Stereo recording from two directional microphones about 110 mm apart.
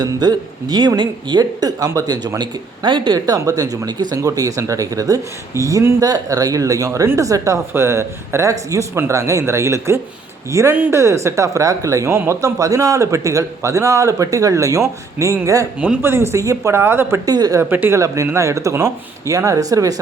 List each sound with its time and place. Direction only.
0.0 s speech: 40° right (ahead or behind); by 17.2 s 20° right (ahead or behind)
17.2 s speech: 35° right (ahead or behind)
17.6 s speech: 20° right (ahead or behind)